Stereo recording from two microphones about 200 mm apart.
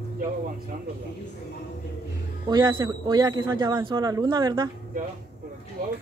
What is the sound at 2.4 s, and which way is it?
Speech, 20° right (ahead or behind).